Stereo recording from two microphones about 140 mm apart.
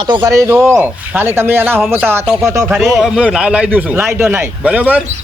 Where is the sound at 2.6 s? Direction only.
5° right (ahead or behind).